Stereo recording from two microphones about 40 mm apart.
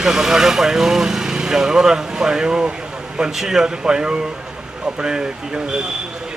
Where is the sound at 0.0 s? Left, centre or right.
Centre.